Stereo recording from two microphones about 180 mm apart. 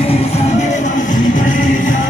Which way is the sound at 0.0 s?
35° left (ahead or behind).